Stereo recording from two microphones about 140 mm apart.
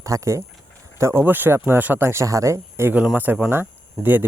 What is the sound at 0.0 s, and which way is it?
Speech, 25° right (ahead or behind).